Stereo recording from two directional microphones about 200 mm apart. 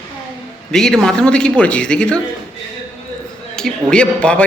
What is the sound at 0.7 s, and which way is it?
A man's voice, 5° left (ahead or behind).